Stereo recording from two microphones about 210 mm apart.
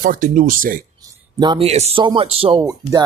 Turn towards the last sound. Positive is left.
turn(degrees=-15)  # may be behind; listen again after turning